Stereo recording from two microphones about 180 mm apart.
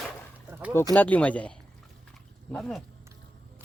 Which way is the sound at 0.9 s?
10° left (ahead or behind).